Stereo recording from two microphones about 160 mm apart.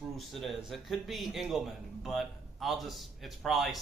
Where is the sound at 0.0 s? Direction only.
Centre (ahead or behind).